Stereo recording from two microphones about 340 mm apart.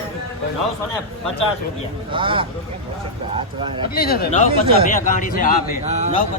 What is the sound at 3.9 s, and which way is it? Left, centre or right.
A man's voice, left.